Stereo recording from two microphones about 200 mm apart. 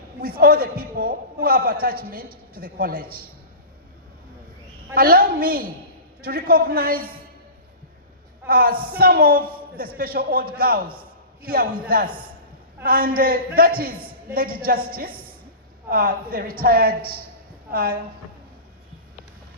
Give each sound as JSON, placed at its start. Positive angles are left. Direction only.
{"t": 0.2, "sound": "a man's voice", "side_deg": -50}
{"t": 4.9, "sound": "a man's voice", "side_deg": -50}
{"t": 8.4, "sound": "a man's voice", "side_deg": -45}